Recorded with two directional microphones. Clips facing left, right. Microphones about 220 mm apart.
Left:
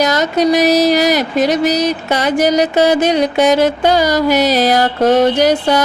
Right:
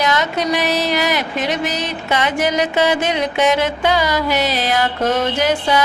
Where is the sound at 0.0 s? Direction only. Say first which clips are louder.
Left 6 dB; 40° left (ahead or behind).